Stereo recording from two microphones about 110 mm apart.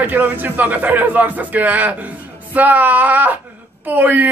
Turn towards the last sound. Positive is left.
turn(degrees=-15)  # may be behind; listen again after turning